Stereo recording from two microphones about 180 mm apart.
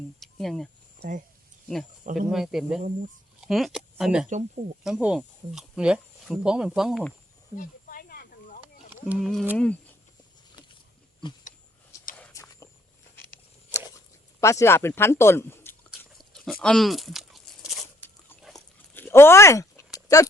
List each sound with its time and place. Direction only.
0.2 s speech: centre (ahead or behind)
0.9 s speech: 45° right (ahead or behind)
2.1 s speech: centre (ahead or behind)
4.3 s speech: 40° right (ahead or behind)
4.8 s speech: 5° right (ahead or behind)
7.5 s snake: 50° left (ahead or behind)
8.9 s speech: 5° right (ahead or behind)
12.1 s whispering: 10° left (ahead or behind)
14.4 s speech: 15° left (ahead or behind)
15.9 s a sound: centre (ahead or behind)
18.9 s a sound: 10° left (ahead or behind)